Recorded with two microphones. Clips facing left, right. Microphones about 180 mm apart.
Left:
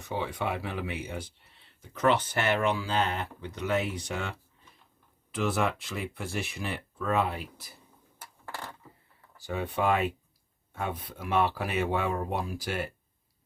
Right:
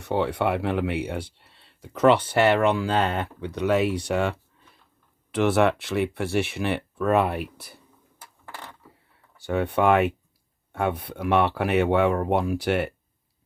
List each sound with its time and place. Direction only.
0.0 s speech: 70° right (ahead or behind)
9.4 s speech: 65° right (ahead or behind)